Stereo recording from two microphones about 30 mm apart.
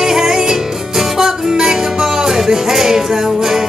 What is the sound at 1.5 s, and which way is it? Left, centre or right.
Music, centre.